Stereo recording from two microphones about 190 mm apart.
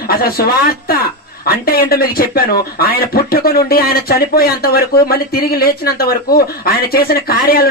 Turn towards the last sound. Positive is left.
turn(degrees=50)  # may be behind; listen again after turning